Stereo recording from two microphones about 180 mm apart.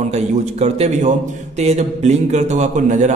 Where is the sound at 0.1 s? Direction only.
35° right (ahead or behind).